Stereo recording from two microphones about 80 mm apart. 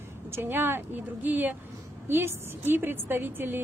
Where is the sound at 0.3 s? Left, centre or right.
Right.